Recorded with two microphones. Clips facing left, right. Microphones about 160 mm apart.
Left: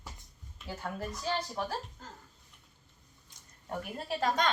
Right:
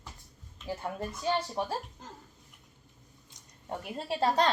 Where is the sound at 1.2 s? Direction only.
25° right (ahead or behind).